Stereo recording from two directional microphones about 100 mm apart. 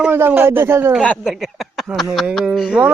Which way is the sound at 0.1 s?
20° right (ahead or behind).